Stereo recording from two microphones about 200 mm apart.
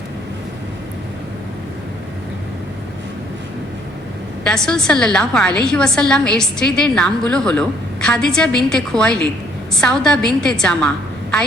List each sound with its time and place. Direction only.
4.4 s a woman's voice: 5° left (ahead or behind)